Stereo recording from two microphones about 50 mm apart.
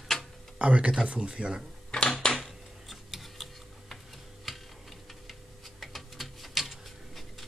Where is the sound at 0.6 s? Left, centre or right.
Right.